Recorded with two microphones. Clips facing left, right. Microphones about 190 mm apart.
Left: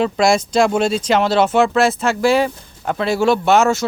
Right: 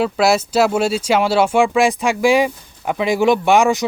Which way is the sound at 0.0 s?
5° right (ahead or behind).